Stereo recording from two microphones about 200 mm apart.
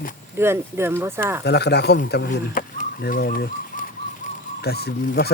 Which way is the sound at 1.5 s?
55° left (ahead or behind).